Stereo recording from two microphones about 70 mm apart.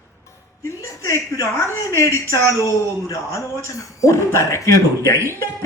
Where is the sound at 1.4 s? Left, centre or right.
Left.